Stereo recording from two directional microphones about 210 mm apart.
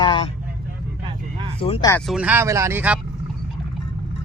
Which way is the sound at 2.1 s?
5° right (ahead or behind).